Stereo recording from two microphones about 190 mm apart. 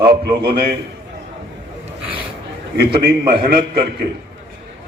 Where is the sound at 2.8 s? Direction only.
55° right (ahead or behind).